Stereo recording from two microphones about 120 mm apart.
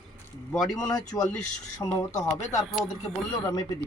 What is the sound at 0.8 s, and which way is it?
Speech, 30° left (ahead or behind).